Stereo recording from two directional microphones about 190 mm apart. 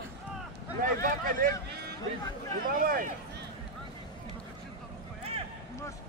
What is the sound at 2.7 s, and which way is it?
Speech, 45° right (ahead or behind).